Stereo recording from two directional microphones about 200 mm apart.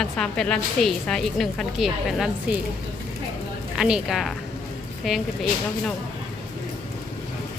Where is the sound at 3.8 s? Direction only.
5° right (ahead or behind).